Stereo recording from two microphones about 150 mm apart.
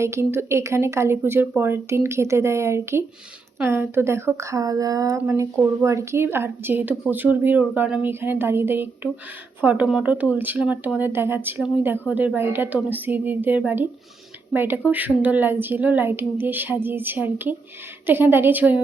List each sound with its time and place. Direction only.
0.0 s speech: 15° right (ahead or behind)